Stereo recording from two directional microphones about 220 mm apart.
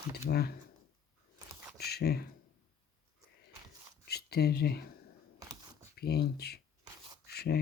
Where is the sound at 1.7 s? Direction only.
45° left (ahead or behind).